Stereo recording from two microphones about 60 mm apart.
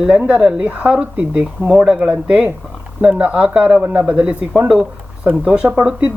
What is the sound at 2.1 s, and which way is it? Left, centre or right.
Speech, right.